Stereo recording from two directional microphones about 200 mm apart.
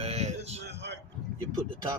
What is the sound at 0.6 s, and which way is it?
Speech, 60° right (ahead or behind).